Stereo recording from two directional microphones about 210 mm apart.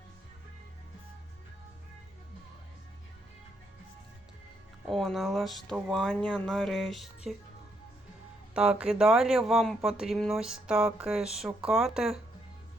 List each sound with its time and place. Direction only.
4.9 s speech: centre (ahead or behind)
8.5 s speech: 5° right (ahead or behind)